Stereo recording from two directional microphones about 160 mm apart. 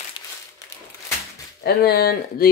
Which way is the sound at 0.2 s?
30° left (ahead or behind).